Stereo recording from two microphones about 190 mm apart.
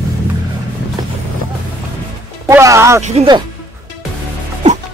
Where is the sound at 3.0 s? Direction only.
30° right (ahead or behind).